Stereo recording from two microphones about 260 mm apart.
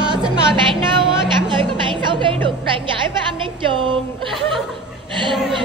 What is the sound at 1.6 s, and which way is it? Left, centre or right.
Music, centre.